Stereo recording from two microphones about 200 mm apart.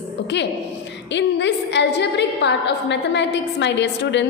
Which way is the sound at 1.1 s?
60° left (ahead or behind).